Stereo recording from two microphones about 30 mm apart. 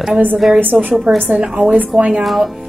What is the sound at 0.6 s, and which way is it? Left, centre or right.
Speech, right.